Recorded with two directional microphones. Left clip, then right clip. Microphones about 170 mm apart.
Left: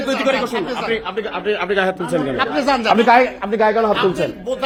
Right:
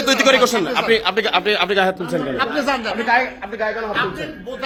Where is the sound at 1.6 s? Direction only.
Centre (ahead or behind).